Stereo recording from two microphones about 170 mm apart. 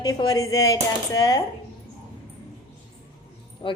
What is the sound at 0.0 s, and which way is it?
Speech, 25° left (ahead or behind).